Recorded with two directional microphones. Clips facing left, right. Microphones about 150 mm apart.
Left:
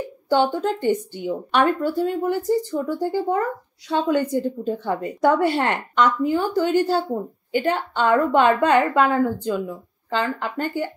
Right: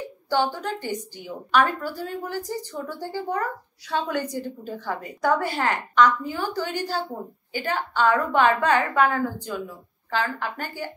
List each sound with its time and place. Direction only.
0.3 s a woman's voice: 20° left (ahead or behind)